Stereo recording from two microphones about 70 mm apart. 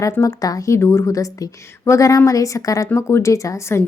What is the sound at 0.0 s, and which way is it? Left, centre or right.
A woman's voice, left.